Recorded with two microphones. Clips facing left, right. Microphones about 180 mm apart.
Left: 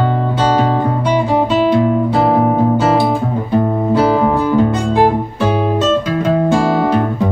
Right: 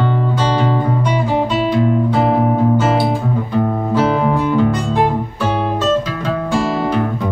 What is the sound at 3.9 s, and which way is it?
Music, 35° left (ahead or behind).